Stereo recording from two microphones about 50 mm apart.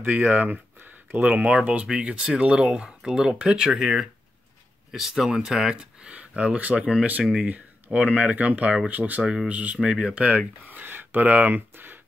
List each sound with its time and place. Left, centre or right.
0.0 s speech: right
9.8 s speech: centre
10.2 s speech: right
11.7 s a sound: right